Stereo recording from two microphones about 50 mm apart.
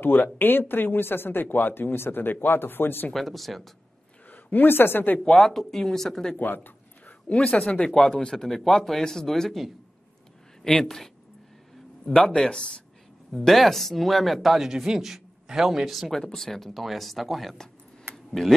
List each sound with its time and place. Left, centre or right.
0.0 s speech: left
3.1 s speech: centre
4.3 s speech: left
5.2 s speech: centre
6.4 s a sound: left
7.3 s speech: left
7.9 s speech: centre
10.8 s speech: centre
12.3 s speech: centre
13.3 s speech: centre
18.1 s a sound: centre